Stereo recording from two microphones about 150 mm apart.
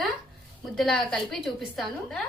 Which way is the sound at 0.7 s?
Centre (ahead or behind).